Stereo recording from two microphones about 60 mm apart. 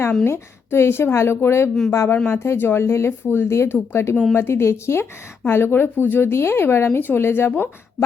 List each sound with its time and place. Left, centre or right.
0.3 s speech: left
7.5 s speech: left